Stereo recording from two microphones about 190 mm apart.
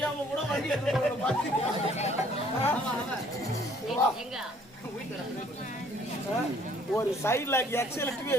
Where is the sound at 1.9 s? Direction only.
35° left (ahead or behind).